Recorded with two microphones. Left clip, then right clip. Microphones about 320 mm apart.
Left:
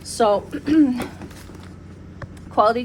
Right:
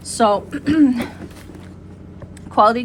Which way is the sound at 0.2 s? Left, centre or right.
Right.